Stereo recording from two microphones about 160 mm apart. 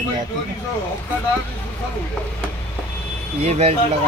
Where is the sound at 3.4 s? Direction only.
40° right (ahead or behind).